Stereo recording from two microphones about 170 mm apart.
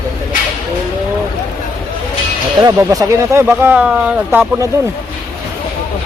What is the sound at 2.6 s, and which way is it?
Speech, 20° right (ahead or behind).